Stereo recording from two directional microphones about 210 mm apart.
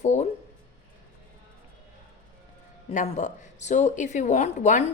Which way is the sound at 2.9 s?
30° left (ahead or behind).